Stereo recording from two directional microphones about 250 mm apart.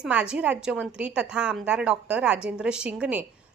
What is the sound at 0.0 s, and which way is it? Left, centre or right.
A woman's voice, centre.